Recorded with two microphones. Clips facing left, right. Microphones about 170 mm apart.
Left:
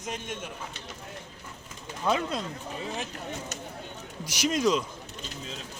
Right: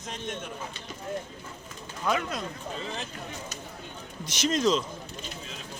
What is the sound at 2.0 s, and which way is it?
Speech, 25° left (ahead or behind).